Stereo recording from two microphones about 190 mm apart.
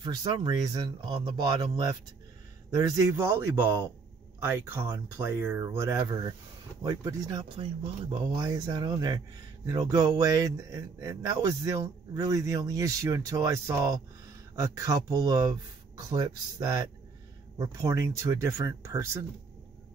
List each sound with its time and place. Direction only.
0.0 s speech: 25° right (ahead or behind)